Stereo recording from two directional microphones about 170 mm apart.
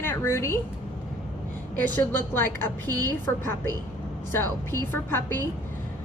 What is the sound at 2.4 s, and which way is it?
A woman's voice, 10° left (ahead or behind).